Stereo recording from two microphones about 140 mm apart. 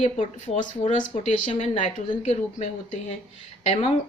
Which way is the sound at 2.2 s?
50° left (ahead or behind).